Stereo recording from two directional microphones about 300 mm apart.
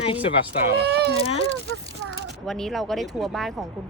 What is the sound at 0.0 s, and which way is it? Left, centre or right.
Speech, centre.